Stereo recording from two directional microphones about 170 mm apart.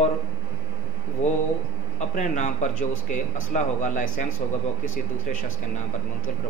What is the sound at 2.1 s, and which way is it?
A man's voice, 45° left (ahead or behind).